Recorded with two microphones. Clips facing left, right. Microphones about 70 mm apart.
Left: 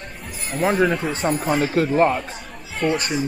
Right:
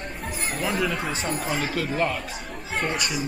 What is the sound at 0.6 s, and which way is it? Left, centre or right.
A man's voice, left.